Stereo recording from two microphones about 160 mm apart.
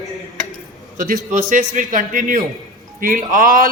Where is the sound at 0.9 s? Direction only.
55° right (ahead or behind).